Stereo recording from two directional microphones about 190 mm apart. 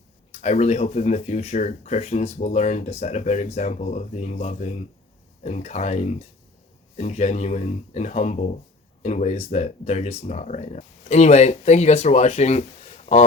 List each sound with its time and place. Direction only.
0.3 s speech: 35° left (ahead or behind)